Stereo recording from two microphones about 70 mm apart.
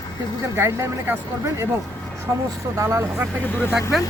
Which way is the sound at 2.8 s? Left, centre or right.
Right.